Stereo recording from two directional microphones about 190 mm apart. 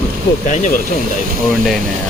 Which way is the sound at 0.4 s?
40° left (ahead or behind).